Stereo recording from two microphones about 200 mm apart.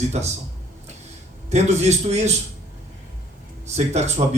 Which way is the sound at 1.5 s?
35° right (ahead or behind).